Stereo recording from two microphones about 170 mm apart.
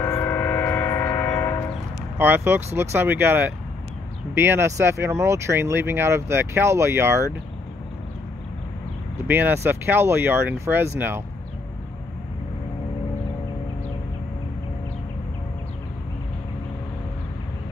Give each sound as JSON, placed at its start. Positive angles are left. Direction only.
{"t": 0.0, "sound": "train", "side_deg": 15}
{"t": 2.1, "sound": "speech", "side_deg": -10}
{"t": 9.3, "sound": "speech", "side_deg": -15}